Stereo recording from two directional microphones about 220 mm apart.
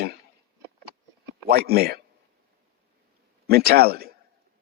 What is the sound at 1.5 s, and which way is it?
Speech, 45° right (ahead or behind).